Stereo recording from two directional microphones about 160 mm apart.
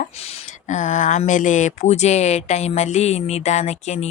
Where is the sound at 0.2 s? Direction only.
40° left (ahead or behind).